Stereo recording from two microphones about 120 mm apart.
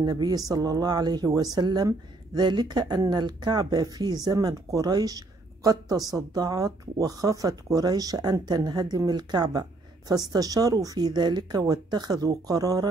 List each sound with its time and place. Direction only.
0.0 s speech: 35° right (ahead or behind)